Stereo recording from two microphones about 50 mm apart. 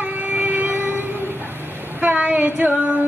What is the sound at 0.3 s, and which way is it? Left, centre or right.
Vehicle, right.